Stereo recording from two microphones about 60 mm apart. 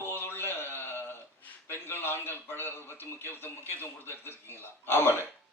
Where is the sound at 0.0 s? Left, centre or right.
Left.